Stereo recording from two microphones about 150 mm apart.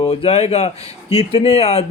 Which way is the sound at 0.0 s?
40° left (ahead or behind).